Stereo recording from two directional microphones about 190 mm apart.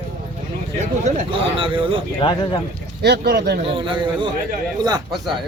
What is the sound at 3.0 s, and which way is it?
Speech, 60° right (ahead or behind).